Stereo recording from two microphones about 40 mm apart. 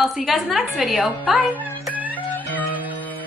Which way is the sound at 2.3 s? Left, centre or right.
Left.